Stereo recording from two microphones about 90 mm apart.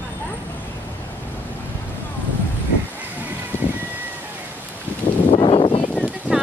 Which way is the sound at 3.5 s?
20° left (ahead or behind).